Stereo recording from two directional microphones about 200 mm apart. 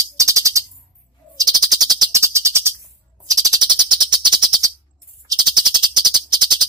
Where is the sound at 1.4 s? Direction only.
20° right (ahead or behind).